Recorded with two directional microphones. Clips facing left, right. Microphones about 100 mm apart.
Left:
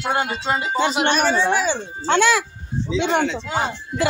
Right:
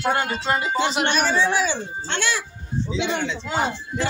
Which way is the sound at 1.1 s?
45° left (ahead or behind).